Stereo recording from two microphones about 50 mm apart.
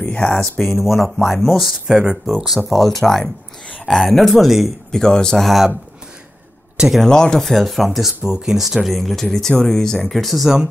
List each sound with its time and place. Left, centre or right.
0.0 s speech: left
0.4 s speech: centre
2.0 s speech: centre
2.3 s speech: centre
4.9 s speech: centre
5.4 s speech: centre
6.9 s speech: centre
8.2 s speech: centre
10.1 s speech: centre